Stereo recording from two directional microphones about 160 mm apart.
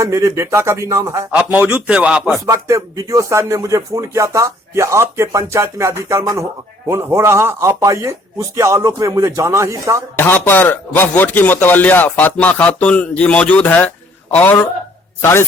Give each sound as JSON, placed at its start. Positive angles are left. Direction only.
{"t": 0.0, "sound": "a man's voice", "side_deg": -20}
{"t": 2.5, "sound": "a man's voice", "side_deg": -20}
{"t": 10.2, "sound": "speech", "side_deg": 15}